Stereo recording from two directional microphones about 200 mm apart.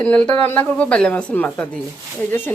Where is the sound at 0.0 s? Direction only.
5° left (ahead or behind).